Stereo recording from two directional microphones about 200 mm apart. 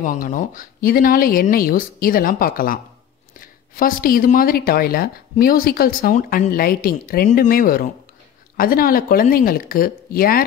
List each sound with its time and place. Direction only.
0.0 s speech: 40° left (ahead or behind)